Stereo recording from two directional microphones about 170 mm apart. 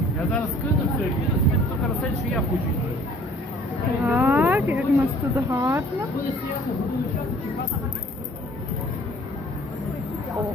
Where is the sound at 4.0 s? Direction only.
10° right (ahead or behind).